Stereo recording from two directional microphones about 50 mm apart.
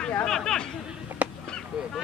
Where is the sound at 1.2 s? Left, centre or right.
Right.